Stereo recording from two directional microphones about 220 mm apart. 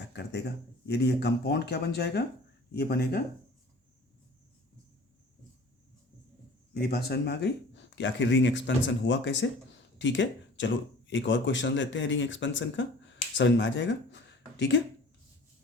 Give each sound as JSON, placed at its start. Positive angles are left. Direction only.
{"t": 0.1, "sound": "speech", "side_deg": 50}
{"t": 6.7, "sound": "speech", "side_deg": 45}